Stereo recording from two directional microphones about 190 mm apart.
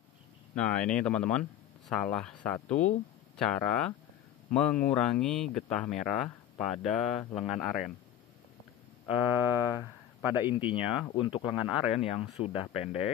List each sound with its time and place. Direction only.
0.6 s speech: 5° left (ahead or behind)
9.1 s a sound: 10° right (ahead or behind)
10.5 s speech: 25° left (ahead or behind)
11.4 s speech: 5° right (ahead or behind)
12.0 s speech: 30° left (ahead or behind)